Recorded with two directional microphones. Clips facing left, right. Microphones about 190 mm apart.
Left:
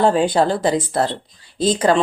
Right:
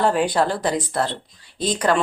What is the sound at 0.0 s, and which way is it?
Speech, 25° left (ahead or behind).